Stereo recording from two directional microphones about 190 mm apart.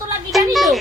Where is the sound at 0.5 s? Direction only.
Centre (ahead or behind).